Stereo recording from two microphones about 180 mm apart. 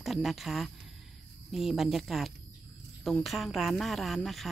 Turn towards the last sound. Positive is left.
turn(degrees=0)  # may be behind; listen again after turning